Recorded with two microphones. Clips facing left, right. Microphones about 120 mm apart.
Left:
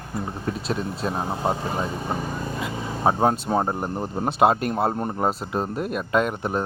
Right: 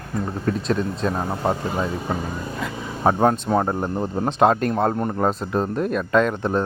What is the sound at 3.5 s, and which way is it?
Speech, 25° left (ahead or behind).